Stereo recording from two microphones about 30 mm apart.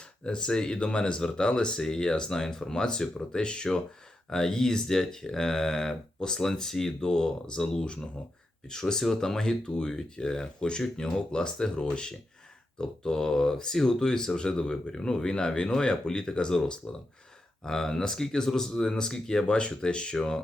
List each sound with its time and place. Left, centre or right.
0.3 s speech: left
7.0 s speech: left
8.7 s speech: centre
17.7 s speech: centre
19.5 s speech: left